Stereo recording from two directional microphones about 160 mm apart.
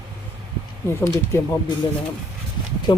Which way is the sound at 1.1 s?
15° left (ahead or behind).